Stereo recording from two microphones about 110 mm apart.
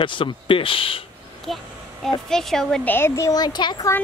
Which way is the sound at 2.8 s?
20° left (ahead or behind).